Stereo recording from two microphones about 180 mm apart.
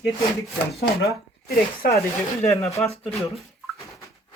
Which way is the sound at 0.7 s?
60° left (ahead or behind).